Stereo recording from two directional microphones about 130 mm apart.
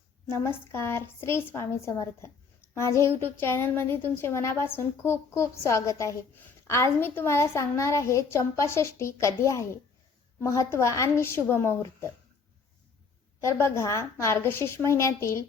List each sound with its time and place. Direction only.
0.3 s a woman's voice: 20° left (ahead or behind)
13.4 s a woman's voice: 20° left (ahead or behind)